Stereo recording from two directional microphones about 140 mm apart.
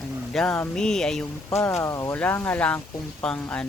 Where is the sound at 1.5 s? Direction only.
20° left (ahead or behind).